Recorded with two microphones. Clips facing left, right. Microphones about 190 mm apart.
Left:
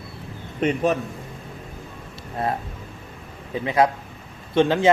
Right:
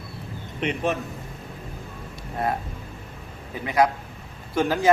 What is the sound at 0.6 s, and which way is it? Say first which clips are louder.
Speech: left 5 dB; 40° left (ahead or behind).